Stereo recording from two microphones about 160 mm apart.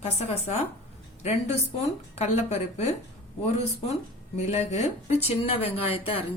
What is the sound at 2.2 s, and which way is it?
Speech, 45° left (ahead or behind).